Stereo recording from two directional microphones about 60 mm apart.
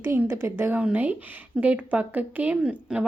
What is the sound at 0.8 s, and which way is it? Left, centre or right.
A woman's voice, right.